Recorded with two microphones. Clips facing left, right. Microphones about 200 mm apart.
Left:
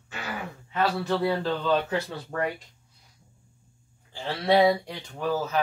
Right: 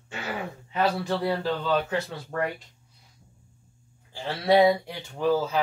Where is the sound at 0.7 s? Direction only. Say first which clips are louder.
Even; 15° right (ahead or behind).